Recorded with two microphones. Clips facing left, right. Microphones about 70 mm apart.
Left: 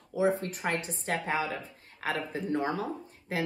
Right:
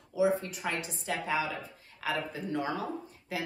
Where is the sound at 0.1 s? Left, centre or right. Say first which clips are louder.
Even; left.